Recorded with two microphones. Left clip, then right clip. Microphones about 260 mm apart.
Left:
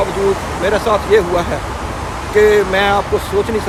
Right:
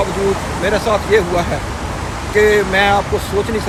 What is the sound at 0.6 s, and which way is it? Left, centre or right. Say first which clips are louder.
Speech: left 1 dB; centre.